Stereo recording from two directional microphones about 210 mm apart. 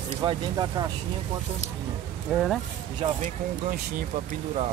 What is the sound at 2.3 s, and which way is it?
Speech, centre (ahead or behind).